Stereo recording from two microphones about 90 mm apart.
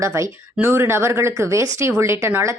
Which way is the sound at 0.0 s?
35° right (ahead or behind).